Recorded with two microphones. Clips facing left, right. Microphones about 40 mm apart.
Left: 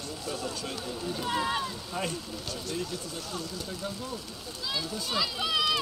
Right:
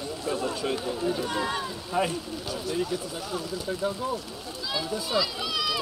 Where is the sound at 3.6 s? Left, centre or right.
Centre.